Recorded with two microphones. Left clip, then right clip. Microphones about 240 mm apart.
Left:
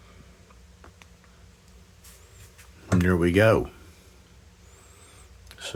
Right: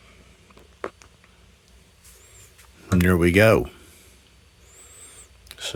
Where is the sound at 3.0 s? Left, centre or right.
Right.